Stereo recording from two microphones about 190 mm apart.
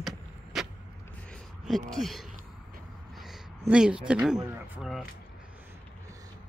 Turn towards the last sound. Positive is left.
turn(degrees=0)  # may be behind; listen again after turning